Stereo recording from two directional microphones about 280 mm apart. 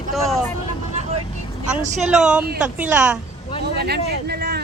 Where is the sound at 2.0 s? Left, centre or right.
Centre.